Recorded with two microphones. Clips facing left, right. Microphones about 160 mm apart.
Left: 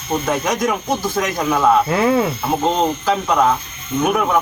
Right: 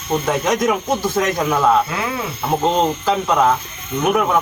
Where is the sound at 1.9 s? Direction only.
50° left (ahead or behind).